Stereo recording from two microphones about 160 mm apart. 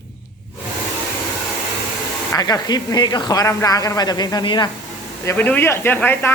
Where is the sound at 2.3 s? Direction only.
25° left (ahead or behind).